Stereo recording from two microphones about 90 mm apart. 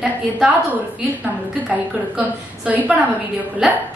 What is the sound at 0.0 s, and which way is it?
A woman's voice, 15° right (ahead or behind).